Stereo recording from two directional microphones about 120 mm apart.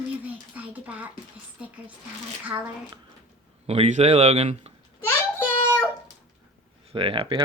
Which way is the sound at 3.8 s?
70° right (ahead or behind).